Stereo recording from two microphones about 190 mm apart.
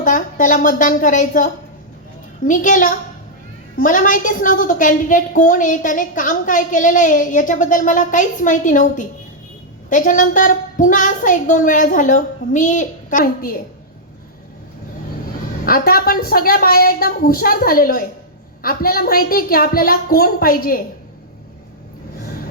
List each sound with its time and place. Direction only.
0.0 s a woman's voice: 45° left (ahead or behind)
15.6 s a woman's voice: 50° left (ahead or behind)